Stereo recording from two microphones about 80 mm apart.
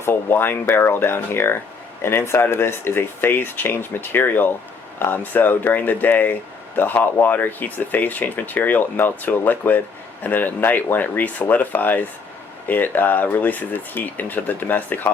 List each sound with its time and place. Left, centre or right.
0.0 s speech: left